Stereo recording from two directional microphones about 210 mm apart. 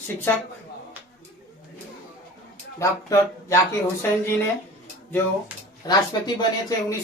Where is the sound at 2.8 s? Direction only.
15° left (ahead or behind).